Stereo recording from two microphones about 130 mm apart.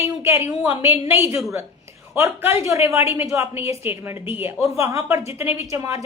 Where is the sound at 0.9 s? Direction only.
20° right (ahead or behind).